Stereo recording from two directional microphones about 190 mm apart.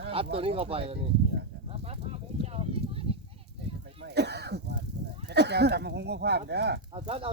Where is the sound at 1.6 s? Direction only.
30° right (ahead or behind).